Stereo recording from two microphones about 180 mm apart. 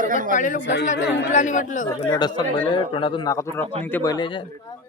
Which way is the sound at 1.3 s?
45° left (ahead or behind).